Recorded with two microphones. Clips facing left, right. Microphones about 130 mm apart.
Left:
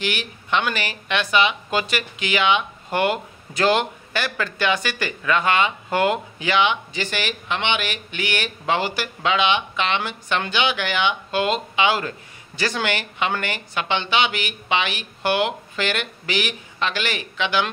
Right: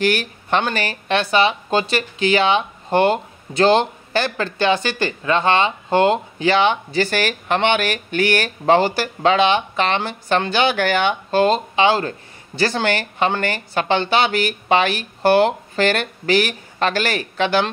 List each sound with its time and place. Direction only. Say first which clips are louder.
0.0 s speech: right 8 dB; 45° right (ahead or behind)